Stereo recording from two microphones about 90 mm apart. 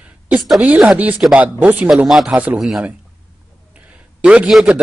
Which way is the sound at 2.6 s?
5° right (ahead or behind).